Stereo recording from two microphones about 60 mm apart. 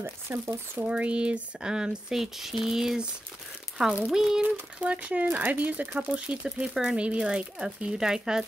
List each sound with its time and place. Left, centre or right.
0.3 s speech: right; by 4.5 s centre
4.7 s speech: right